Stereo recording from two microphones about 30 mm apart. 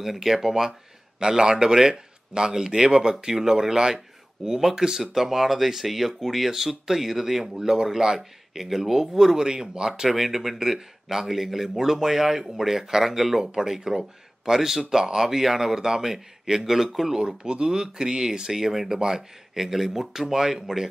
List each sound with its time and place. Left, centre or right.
0.0 s a man's voice: centre
7.5 s a man's voice: right
9.4 s a man's voice: right
10.0 s a man's voice: centre
13.6 s a man's voice: centre
17.2 s speech: right
17.6 s a man's voice: right
18.6 s a man's voice: centre
18.9 s a man's voice: centre